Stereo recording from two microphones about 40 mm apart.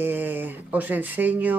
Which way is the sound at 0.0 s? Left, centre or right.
Right.